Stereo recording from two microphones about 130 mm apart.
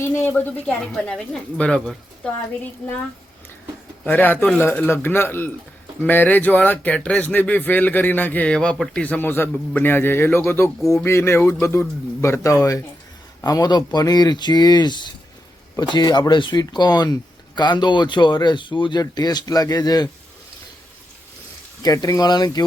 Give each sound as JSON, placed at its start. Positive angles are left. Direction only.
{"t": 0.0, "sound": "speech", "side_deg": 15}
{"t": 4.0, "sound": "speech", "side_deg": 15}
{"t": 21.8, "sound": "speech", "side_deg": 25}